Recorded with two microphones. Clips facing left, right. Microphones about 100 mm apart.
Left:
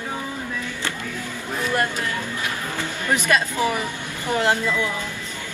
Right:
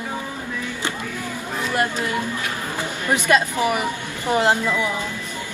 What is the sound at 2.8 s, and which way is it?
A woman's voice, 20° right (ahead or behind).